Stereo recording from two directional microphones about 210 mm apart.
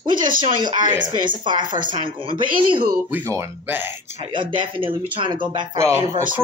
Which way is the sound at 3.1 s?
10° right (ahead or behind).